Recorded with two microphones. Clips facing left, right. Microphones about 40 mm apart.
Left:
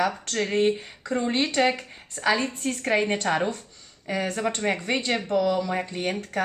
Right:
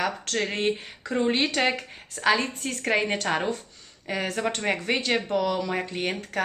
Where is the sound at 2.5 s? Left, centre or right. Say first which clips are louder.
Left 3 dB; centre.